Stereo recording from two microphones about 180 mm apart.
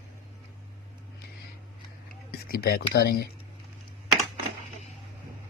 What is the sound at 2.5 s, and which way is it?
Speech, 60° left (ahead or behind).